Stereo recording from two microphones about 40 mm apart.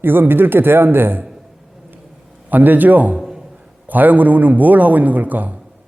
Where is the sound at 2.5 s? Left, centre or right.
Right.